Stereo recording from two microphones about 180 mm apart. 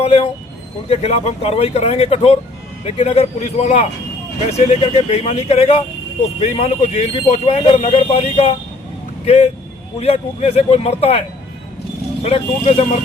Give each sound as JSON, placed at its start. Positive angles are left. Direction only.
{"t": 0.9, "sound": "speech", "side_deg": 35}
{"t": 12.2, "sound": "speech", "side_deg": 35}